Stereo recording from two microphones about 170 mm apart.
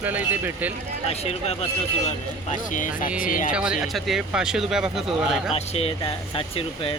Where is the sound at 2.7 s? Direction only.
50° left (ahead or behind).